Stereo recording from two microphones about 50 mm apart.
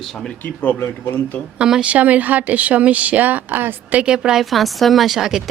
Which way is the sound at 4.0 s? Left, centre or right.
Centre.